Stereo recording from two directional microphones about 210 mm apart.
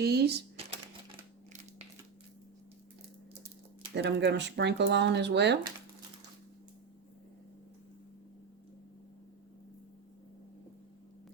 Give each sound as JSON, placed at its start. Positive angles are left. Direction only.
{"t": 0.0, "sound": "speech", "side_deg": -50}
{"t": 0.6, "sound": "typewriter", "side_deg": -30}
{"t": 3.9, "sound": "speech", "side_deg": -55}